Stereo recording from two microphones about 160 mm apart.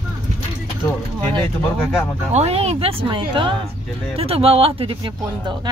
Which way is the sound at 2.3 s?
40° right (ahead or behind).